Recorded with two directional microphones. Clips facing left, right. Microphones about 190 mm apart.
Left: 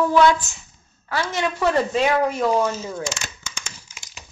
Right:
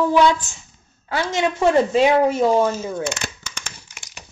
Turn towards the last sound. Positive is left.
turn(degrees=-60)  # may be behind; listen again after turning